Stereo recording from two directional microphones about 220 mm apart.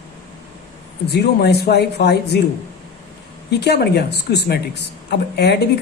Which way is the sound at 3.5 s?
50° left (ahead or behind).